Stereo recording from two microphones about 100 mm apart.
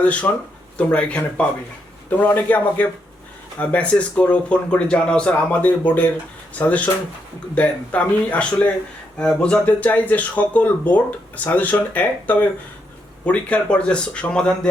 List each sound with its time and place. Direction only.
0.0 s speech: 15° left (ahead or behind)